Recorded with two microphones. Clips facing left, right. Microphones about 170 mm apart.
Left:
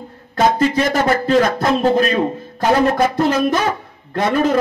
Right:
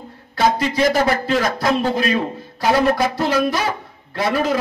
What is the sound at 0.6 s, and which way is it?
Speech, 40° left (ahead or behind).